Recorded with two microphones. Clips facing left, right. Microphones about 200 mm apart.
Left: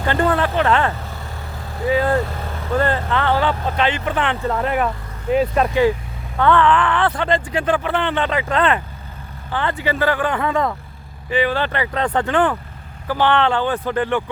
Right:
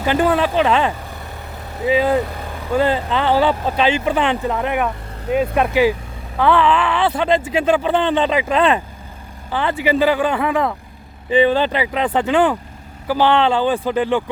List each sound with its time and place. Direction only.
0.0 s speech: 10° right (ahead or behind)
7.3 s speech: 25° right (ahead or behind); by 10.8 s 5° right (ahead or behind)
11.3 s speech: 20° right (ahead or behind)